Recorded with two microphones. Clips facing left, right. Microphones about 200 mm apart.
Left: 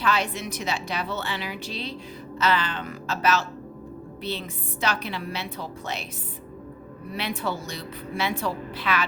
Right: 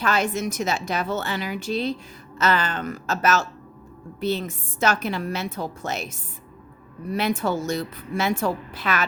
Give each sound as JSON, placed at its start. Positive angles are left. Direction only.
{"t": 0.0, "sound": "a woman's voice", "side_deg": -45}
{"t": 7.1, "sound": "a woman's voice", "side_deg": -45}